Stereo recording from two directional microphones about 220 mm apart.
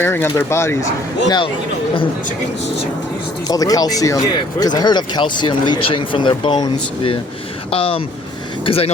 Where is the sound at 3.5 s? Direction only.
15° left (ahead or behind).